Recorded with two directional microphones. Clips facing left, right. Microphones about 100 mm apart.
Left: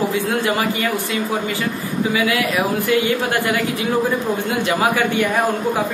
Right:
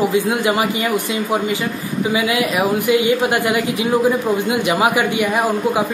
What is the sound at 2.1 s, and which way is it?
A woman's voice, 20° right (ahead or behind).